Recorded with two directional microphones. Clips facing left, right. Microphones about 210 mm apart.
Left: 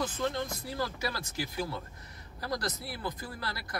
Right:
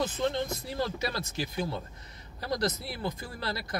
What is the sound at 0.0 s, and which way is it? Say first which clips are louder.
Speech: right 3 dB; 25° right (ahead or behind).